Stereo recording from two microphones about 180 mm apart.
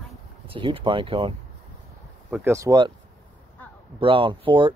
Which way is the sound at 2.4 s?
15° right (ahead or behind).